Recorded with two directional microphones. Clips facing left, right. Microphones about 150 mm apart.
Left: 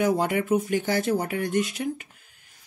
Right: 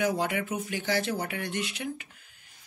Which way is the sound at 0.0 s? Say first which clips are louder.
Left 5 dB; 45° left (ahead or behind).